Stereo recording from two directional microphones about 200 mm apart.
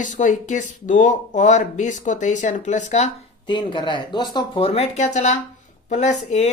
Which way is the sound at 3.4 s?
25° left (ahead or behind).